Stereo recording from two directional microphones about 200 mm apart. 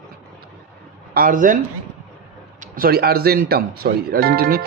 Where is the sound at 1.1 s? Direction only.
45° right (ahead or behind).